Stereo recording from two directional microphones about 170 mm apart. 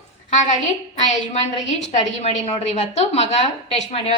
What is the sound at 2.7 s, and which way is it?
Speech, 40° left (ahead or behind).